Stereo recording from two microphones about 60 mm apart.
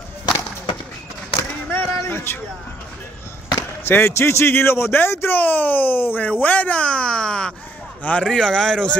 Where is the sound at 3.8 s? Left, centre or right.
Left.